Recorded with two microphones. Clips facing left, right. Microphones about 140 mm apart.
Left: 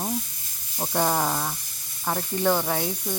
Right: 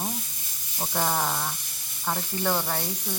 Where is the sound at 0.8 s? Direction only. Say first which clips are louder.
Left 3 dB; 5° left (ahead or behind).